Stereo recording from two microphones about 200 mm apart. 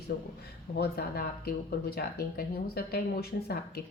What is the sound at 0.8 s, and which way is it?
Speech, 50° left (ahead or behind).